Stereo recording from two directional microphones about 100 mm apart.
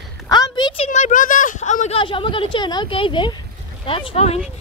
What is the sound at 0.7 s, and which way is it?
Speech, 75° left (ahead or behind).